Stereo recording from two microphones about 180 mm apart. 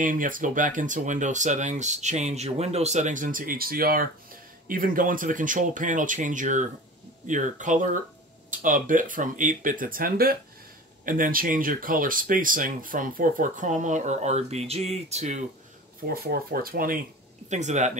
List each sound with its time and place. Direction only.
0.0 s speech: 50° right (ahead or behind)
16.1 s speech: 55° right (ahead or behind)
17.5 s speech: 40° right (ahead or behind)